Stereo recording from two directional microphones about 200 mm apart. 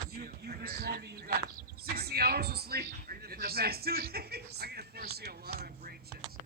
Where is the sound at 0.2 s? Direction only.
50° right (ahead or behind).